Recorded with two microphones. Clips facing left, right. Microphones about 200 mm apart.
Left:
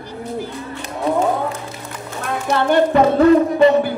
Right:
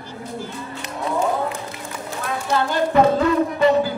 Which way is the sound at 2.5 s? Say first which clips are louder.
Left 6 dB; 65° left (ahead or behind).